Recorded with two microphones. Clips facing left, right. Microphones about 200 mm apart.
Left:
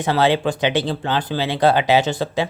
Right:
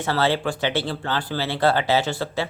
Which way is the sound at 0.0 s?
15° left (ahead or behind).